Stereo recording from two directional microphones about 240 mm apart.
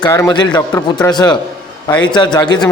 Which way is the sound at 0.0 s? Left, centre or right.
Centre.